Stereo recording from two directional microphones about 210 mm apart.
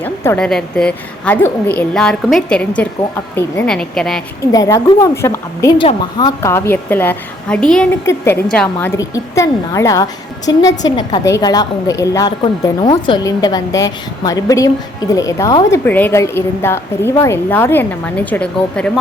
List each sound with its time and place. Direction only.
0.0 s a woman's voice: 10° left (ahead or behind)
4.5 s a woman's voice: 15° left (ahead or behind)